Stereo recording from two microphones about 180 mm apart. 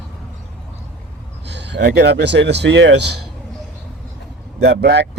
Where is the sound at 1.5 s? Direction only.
75° right (ahead or behind).